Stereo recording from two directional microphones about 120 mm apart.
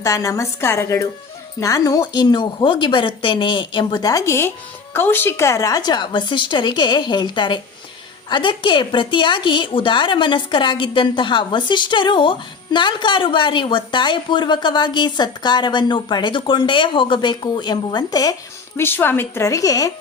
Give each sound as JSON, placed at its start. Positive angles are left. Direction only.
{"t": 0.0, "sound": "a woman's voice", "side_deg": 25}
{"t": 18.8, "sound": "a woman's voice", "side_deg": 20}